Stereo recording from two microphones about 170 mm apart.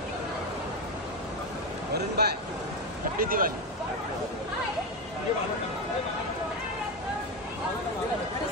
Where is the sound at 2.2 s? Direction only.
70° right (ahead or behind).